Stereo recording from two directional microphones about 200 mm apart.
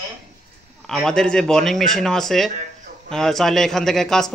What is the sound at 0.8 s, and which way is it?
Speech, 5° left (ahead or behind).